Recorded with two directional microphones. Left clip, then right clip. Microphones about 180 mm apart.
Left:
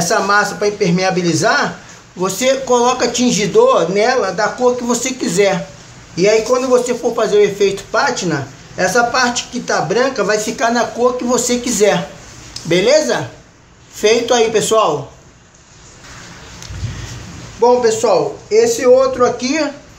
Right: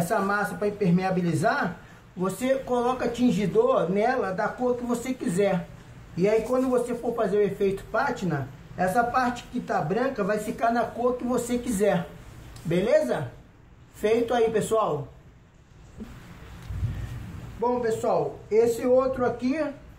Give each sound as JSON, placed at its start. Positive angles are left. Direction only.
{"t": 0.1, "sound": "speech", "side_deg": 25}
{"t": 18.5, "sound": "speech", "side_deg": 20}